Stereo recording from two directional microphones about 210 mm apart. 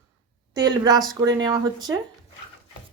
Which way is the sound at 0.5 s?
20° right (ahead or behind).